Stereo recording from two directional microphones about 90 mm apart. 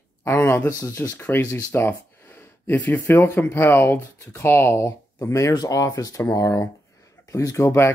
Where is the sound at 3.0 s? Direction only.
30° left (ahead or behind).